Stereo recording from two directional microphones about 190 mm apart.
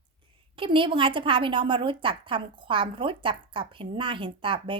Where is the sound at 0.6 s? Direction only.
25° right (ahead or behind).